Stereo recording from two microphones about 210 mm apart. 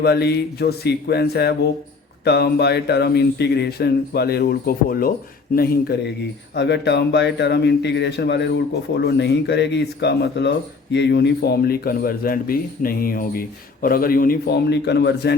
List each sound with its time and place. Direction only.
0.0 s speech: 50° left (ahead or behind)